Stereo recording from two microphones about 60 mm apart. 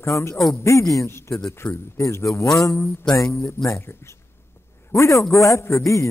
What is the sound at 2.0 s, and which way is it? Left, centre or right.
Speech, left.